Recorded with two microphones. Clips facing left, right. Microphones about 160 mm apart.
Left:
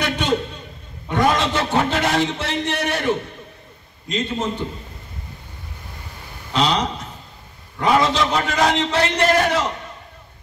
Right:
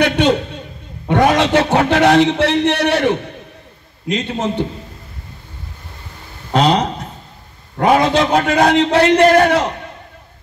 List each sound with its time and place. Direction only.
0.0 s a man's voice: 65° right (ahead or behind)
6.5 s a sound: 55° right (ahead or behind)
7.7 s a man's voice: 55° right (ahead or behind)